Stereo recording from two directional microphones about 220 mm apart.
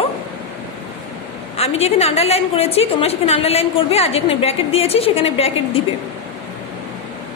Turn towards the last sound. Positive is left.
turn(degrees=25)  # may be behind; listen again after turning